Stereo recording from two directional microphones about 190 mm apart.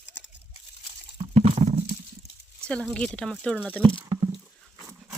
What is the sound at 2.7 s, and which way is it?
Speech, 5° left (ahead or behind).